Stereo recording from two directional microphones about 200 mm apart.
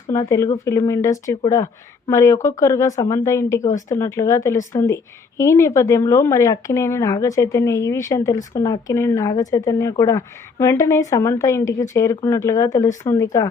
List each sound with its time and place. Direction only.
0.1 s speech: 15° left (ahead or behind)